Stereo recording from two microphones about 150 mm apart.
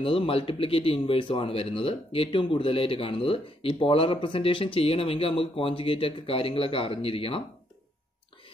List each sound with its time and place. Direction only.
0.0 s speech: 35° left (ahead or behind)